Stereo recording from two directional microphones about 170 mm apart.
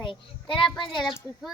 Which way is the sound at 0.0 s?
30° left (ahead or behind).